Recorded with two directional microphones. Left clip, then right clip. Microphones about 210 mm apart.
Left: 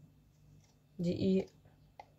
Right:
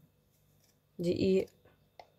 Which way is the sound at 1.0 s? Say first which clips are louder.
Right 5 dB; 35° right (ahead or behind).